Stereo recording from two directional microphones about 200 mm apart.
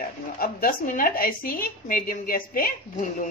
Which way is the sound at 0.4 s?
45° left (ahead or behind).